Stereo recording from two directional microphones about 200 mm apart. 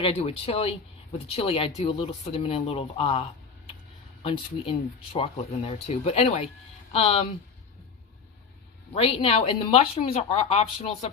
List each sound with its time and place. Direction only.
0.0 s speech: 30° left (ahead or behind)
9.0 s speech: 30° left (ahead or behind)